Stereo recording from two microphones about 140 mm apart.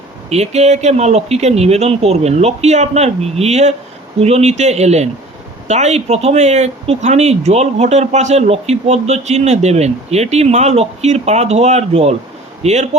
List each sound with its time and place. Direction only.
0.3 s speech: 50° right (ahead or behind)